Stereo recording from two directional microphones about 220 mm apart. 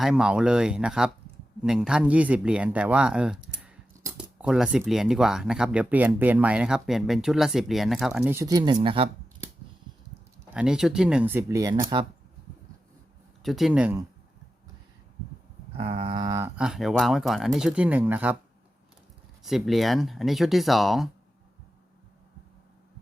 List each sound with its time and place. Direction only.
0.0 s speech: 5° right (ahead or behind); by 9.0 s 25° right (ahead or behind)
10.5 s speech: 5° right (ahead or behind); by 12.0 s 20° right (ahead or behind)
13.4 s speech: centre (ahead or behind)
15.8 s a sound: 25° right (ahead or behind)
16.6 s speech: centre (ahead or behind)
19.4 s speech: centre (ahead or behind)